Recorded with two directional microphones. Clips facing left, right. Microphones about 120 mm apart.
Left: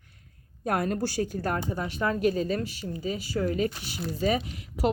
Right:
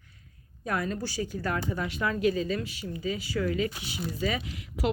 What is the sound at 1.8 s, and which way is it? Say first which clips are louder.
Speech: left 2 dB; 40° left (ahead or behind).